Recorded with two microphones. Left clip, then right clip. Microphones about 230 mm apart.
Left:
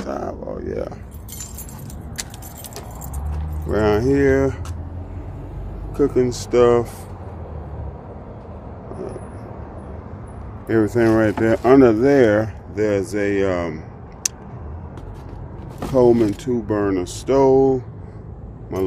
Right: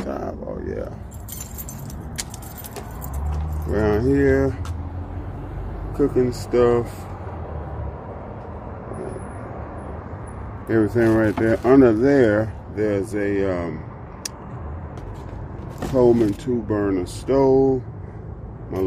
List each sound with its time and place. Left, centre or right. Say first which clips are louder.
0.0 s a sound: left 2 dB; centre
3.8 s speech: left 2 dB; centre
5.9 s speech: left 2 dB; centre
10.7 s speech: left 2 dB; centre
14.2 s a sound: left 8 dB; centre
15.9 s speech: left 2 dB; centre